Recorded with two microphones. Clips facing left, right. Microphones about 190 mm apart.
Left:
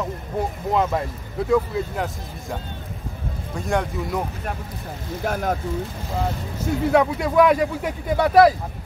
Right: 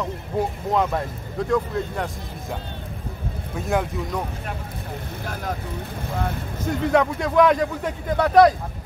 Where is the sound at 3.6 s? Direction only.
5° right (ahead or behind).